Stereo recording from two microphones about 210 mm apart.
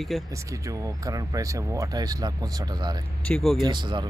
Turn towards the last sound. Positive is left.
turn(degrees=-20)  # may be behind; listen again after turning